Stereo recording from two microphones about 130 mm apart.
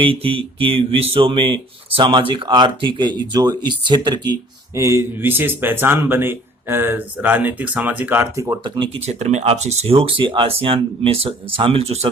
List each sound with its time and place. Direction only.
0.0 s speech: 45° right (ahead or behind); by 8.5 s 20° right (ahead or behind)
8.6 s speech: 35° right (ahead or behind)
9.0 s speech: 60° right (ahead or behind)